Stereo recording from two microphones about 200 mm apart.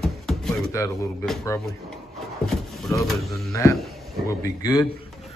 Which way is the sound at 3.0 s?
Centre (ahead or behind).